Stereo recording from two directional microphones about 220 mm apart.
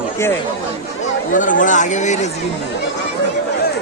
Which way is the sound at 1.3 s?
35° left (ahead or behind).